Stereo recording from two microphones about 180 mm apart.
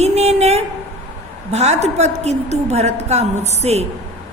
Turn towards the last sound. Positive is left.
turn(degrees=-35)  # may be behind; listen again after turning